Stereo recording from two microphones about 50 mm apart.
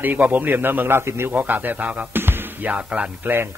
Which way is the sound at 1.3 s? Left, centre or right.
Right.